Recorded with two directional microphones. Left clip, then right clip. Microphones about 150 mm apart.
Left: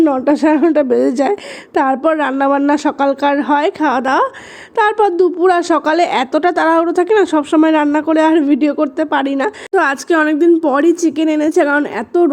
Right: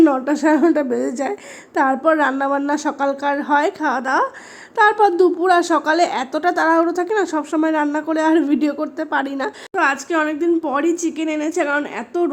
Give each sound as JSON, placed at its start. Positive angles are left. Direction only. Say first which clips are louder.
{"t": 0.0, "sound": "a woman's voice", "louder": "left 3 dB", "side_deg": 15}
{"t": 9.7, "sound": "a woman's voice", "louder": "left 5 dB", "side_deg": 35}